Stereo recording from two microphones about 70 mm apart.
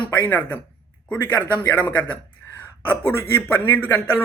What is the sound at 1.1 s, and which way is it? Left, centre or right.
A man's voice, left.